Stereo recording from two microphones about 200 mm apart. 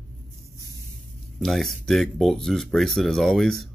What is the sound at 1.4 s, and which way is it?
Speech, centre (ahead or behind).